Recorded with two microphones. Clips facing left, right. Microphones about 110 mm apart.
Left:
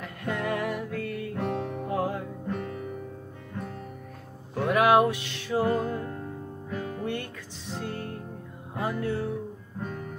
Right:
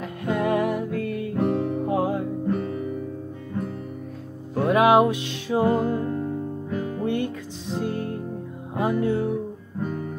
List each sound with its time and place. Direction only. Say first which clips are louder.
0.0 s music: right 6 dB; 20° right (ahead or behind)
1.4 s music: right 8 dB; 10° right (ahead or behind)
1.9 s music: right 3 dB; 20° right (ahead or behind)
4.6 s music: right 4 dB; 20° right (ahead or behind)